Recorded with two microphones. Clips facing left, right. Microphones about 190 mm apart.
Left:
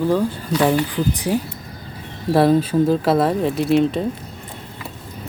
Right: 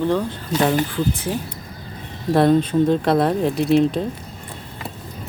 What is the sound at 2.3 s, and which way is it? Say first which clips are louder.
Speech: even; 5° left (ahead or behind).